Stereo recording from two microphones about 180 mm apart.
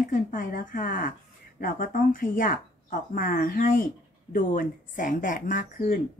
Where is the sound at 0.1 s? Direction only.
50° left (ahead or behind).